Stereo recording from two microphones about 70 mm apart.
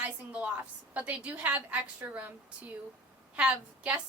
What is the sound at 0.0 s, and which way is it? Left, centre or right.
A woman's voice, centre.